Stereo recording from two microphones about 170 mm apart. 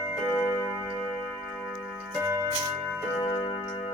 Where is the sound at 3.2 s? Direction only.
25° left (ahead or behind).